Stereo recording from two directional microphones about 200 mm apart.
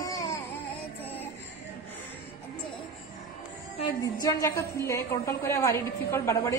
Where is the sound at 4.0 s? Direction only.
15° left (ahead or behind).